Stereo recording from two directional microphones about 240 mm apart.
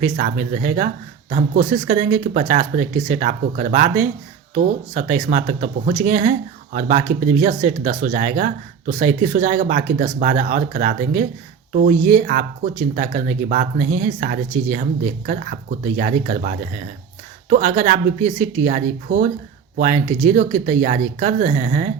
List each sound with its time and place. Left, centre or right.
0.0 s speech: right